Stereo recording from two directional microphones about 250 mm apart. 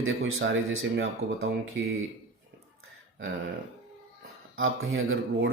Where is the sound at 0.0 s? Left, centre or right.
Right.